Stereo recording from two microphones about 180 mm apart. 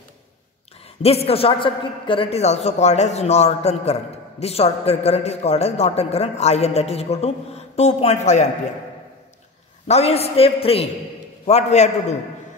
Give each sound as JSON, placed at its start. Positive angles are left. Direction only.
{"t": 1.0, "sound": "a man's voice", "side_deg": 35}
{"t": 9.8, "sound": "a man's voice", "side_deg": 35}